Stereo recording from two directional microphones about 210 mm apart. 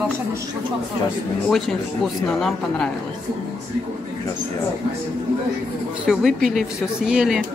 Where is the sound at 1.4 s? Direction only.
Centre (ahead or behind).